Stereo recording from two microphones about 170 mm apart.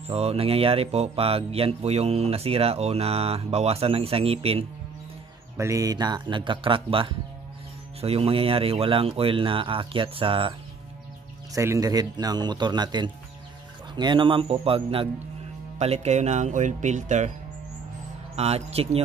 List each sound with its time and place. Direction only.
0.1 s speech: 35° right (ahead or behind)
5.6 s speech: 20° right (ahead or behind)
11.5 s speech: 20° right (ahead or behind); by 17.3 s 45° right (ahead or behind)
18.3 s speech: 40° right (ahead or behind)